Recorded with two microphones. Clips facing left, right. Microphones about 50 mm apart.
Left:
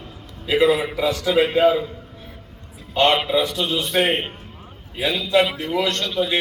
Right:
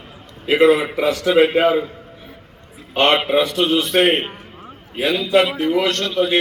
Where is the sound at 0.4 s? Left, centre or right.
Right.